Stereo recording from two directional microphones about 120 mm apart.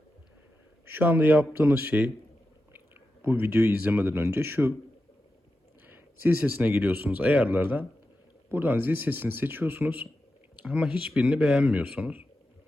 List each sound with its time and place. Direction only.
0.9 s speech: 15° right (ahead or behind)
5.8 s speech: 15° right (ahead or behind)